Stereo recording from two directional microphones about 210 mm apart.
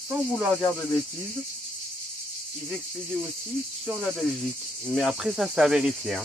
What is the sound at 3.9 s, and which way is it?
Cricket, centre (ahead or behind).